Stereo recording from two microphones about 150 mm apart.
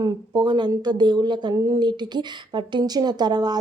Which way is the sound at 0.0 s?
25° right (ahead or behind).